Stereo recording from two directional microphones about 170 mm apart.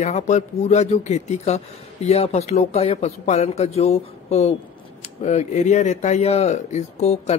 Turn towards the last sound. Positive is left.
turn(degrees=40)  # may be behind; listen again after turning